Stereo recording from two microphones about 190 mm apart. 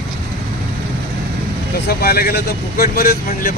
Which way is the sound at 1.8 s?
55° left (ahead or behind).